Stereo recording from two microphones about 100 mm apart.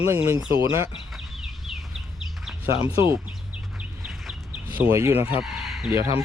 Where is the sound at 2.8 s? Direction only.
25° right (ahead or behind).